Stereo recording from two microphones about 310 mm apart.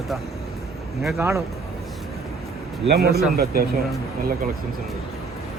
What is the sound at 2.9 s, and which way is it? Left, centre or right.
Speech, right.